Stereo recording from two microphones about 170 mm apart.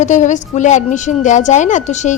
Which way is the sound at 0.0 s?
45° left (ahead or behind).